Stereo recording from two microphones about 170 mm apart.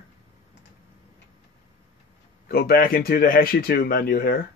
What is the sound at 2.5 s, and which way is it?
Speech, 65° left (ahead or behind).